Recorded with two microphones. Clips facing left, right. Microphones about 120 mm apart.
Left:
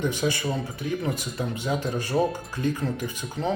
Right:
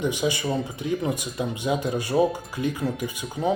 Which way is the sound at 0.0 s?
15° right (ahead or behind).